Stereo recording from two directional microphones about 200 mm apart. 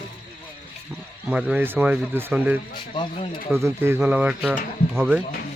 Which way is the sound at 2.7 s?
25° left (ahead or behind).